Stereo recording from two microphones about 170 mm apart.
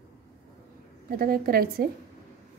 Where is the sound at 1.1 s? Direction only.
60° right (ahead or behind).